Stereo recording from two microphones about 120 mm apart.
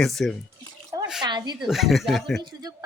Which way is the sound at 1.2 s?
35° right (ahead or behind).